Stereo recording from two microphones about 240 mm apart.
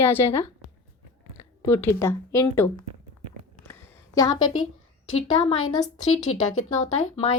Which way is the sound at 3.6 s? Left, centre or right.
Centre.